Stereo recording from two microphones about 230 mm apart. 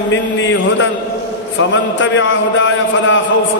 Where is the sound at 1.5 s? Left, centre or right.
Left.